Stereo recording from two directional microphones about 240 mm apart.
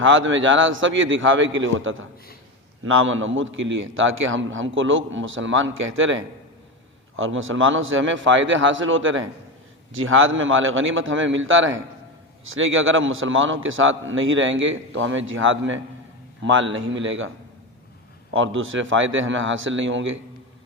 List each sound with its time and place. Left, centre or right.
0.0 s a man's voice: right
18.3 s a man's voice: right